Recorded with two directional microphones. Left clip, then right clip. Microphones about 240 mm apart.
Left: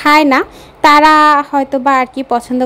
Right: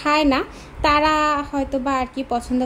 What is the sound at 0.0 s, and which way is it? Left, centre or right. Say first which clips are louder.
A woman's voice: left 10 dB; left.